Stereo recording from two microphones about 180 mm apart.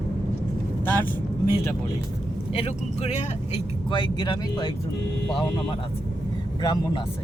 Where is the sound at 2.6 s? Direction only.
35° left (ahead or behind).